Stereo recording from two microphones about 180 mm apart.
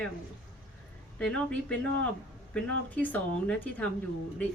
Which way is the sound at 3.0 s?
10° left (ahead or behind).